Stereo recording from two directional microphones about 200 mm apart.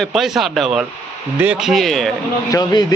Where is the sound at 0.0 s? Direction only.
Centre (ahead or behind).